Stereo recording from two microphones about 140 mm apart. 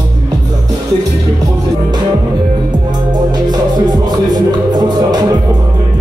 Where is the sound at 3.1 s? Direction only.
30° right (ahead or behind).